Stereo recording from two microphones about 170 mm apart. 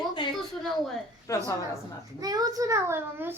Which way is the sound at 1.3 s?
20° left (ahead or behind).